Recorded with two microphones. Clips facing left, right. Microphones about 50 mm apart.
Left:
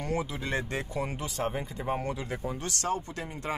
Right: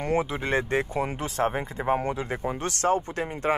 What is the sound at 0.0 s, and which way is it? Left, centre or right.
Speech, right.